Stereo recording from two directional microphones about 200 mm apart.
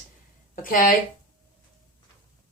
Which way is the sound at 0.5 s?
40° left (ahead or behind).